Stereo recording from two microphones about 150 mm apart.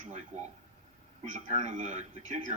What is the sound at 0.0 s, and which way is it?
A man's voice, 50° right (ahead or behind).